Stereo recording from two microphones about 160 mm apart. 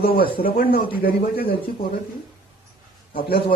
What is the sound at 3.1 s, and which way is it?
Speech, 65° left (ahead or behind).